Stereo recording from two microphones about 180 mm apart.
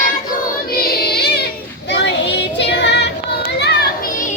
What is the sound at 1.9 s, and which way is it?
Child singing, 80° left.